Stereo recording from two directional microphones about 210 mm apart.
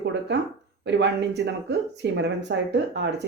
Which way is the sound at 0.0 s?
55° right (ahead or behind).